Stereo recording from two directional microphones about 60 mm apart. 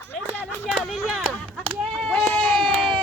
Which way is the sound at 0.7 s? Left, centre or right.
Centre.